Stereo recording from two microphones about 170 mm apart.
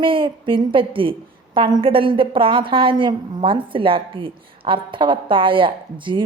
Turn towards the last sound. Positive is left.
turn(degrees=-30)  # may be behind; listen again after turning